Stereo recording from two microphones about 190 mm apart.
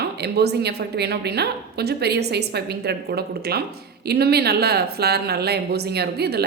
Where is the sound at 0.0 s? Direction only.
60° right (ahead or behind).